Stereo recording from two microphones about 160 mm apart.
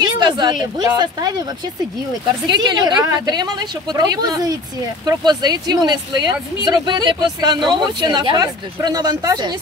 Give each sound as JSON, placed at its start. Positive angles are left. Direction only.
{"t": 0.0, "sound": "a woman's voice", "side_deg": -25}
{"t": 2.4, "sound": "speech", "side_deg": -25}